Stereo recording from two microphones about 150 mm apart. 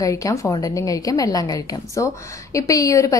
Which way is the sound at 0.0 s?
20° left (ahead or behind).